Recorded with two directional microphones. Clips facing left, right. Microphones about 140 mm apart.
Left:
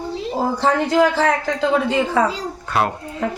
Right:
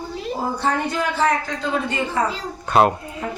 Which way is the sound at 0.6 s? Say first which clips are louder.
Left 9 dB; 90° left.